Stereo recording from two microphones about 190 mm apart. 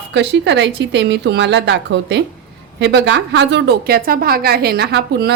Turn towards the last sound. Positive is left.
turn(degrees=-60)  # may be behind; listen again after turning